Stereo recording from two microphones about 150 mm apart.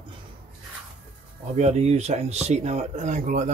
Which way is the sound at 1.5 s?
45° right (ahead or behind).